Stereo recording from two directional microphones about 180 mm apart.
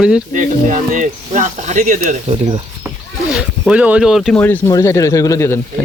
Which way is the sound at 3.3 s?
5° right (ahead or behind).